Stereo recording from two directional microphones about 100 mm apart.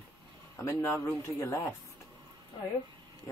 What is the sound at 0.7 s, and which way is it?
Speech, 25° left (ahead or behind).